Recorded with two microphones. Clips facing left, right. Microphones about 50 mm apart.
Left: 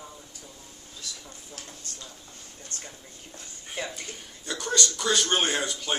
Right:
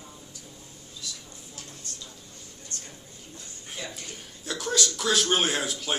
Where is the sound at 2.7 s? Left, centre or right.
Left.